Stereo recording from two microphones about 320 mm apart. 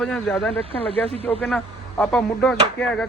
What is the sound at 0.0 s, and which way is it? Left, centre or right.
Speech, centre.